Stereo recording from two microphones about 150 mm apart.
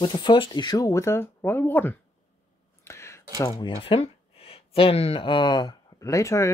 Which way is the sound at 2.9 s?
20° left (ahead or behind).